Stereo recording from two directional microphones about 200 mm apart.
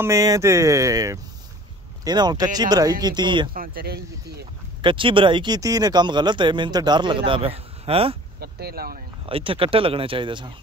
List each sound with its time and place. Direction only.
0.0 s speech: 15° right (ahead or behind)
3.5 s speech: 45° right (ahead or behind)
4.8 s speech: 25° right (ahead or behind)
8.4 s speech: 50° right (ahead or behind)
9.2 s speech: 25° right (ahead or behind)